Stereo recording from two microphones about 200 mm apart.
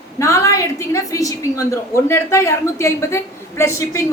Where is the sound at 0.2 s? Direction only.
15° left (ahead or behind).